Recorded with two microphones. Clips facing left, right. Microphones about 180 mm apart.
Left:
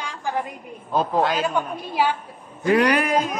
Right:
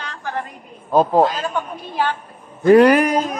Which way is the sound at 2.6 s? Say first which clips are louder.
Right 8 dB; 40° right (ahead or behind).